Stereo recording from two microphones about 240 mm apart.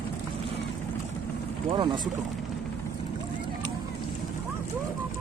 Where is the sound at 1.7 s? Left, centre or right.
Centre.